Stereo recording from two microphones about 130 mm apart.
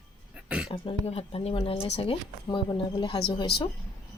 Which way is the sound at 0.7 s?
45° left (ahead or behind).